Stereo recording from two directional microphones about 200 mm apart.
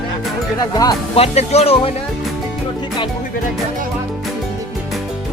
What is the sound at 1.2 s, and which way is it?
Speech, 30° left (ahead or behind).